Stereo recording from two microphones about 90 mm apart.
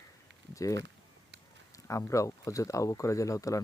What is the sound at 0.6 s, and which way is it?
Speech, 40° left (ahead or behind).